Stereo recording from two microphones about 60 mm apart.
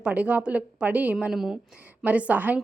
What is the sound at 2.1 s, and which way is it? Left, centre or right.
Speech, right.